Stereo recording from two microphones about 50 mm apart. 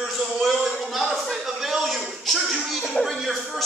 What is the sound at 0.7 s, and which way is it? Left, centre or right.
A man's voice, centre.